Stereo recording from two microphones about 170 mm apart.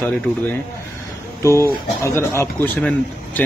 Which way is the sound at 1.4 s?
15° left (ahead or behind).